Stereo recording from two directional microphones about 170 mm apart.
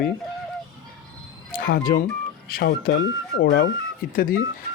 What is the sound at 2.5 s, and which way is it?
Speech, 60° left (ahead or behind).